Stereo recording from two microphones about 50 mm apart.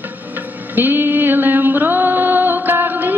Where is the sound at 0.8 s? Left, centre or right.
Right.